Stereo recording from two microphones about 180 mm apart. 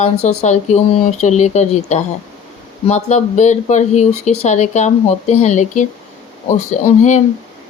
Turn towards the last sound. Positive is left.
turn(degrees=40)  # may be behind; listen again after turning